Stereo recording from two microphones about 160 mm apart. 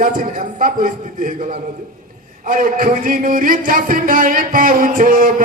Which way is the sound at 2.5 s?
60° right (ahead or behind).